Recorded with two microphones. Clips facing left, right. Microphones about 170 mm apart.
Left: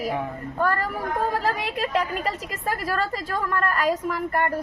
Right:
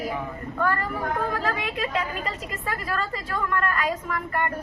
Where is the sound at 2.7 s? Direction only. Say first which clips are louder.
Left 4 dB; 40° left (ahead or behind).